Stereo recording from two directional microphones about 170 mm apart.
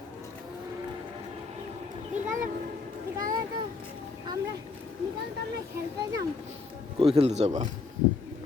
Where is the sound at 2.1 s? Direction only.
50° right (ahead or behind).